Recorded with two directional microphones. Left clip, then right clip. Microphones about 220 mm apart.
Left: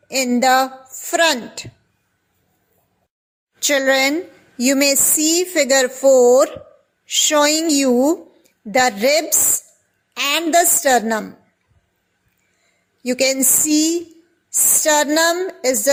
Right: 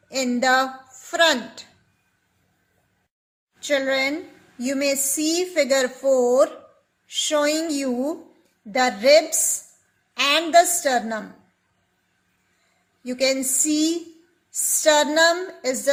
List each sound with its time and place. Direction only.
0.1 s speech: 40° left (ahead or behind)
3.6 s speech: 45° left (ahead or behind)
13.0 s speech: 40° left (ahead or behind)